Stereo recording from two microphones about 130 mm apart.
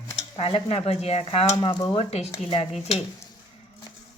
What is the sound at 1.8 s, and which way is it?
Speech, 35° left (ahead or behind).